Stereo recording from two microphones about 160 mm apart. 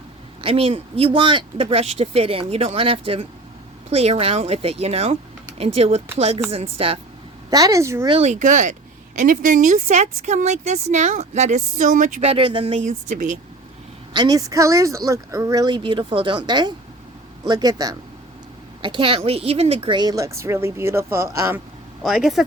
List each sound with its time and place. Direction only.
0.4 s speech: 35° right (ahead or behind)
7.5 s a woman's voice: 20° right (ahead or behind)
8.0 s speech: 40° right (ahead or behind)
12.3 s speech: 35° right (ahead or behind)
12.8 s speech: 50° right (ahead or behind)
14.1 s a woman's voice: 25° right (ahead or behind)
22.0 s speech: centre (ahead or behind)